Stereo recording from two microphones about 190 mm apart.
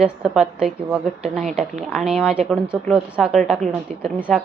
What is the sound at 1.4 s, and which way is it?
Speech, 40° right (ahead or behind).